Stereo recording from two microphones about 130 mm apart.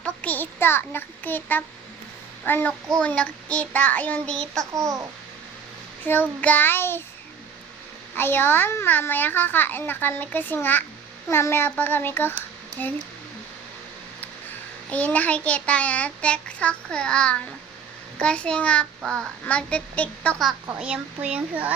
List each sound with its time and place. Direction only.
0.0 s a child's voice: 10° left (ahead or behind)
4.7 s a child's voice: 25° right (ahead or behind)
6.1 s a child's voice: 15° left (ahead or behind)
8.1 s a child's voice: 15° left (ahead or behind)
14.8 s a child's voice: 10° left (ahead or behind)
20.7 s speech: 10° right (ahead or behind)